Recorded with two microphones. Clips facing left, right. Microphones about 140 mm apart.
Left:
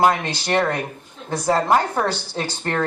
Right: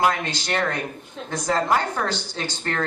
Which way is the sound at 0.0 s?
30° left (ahead or behind).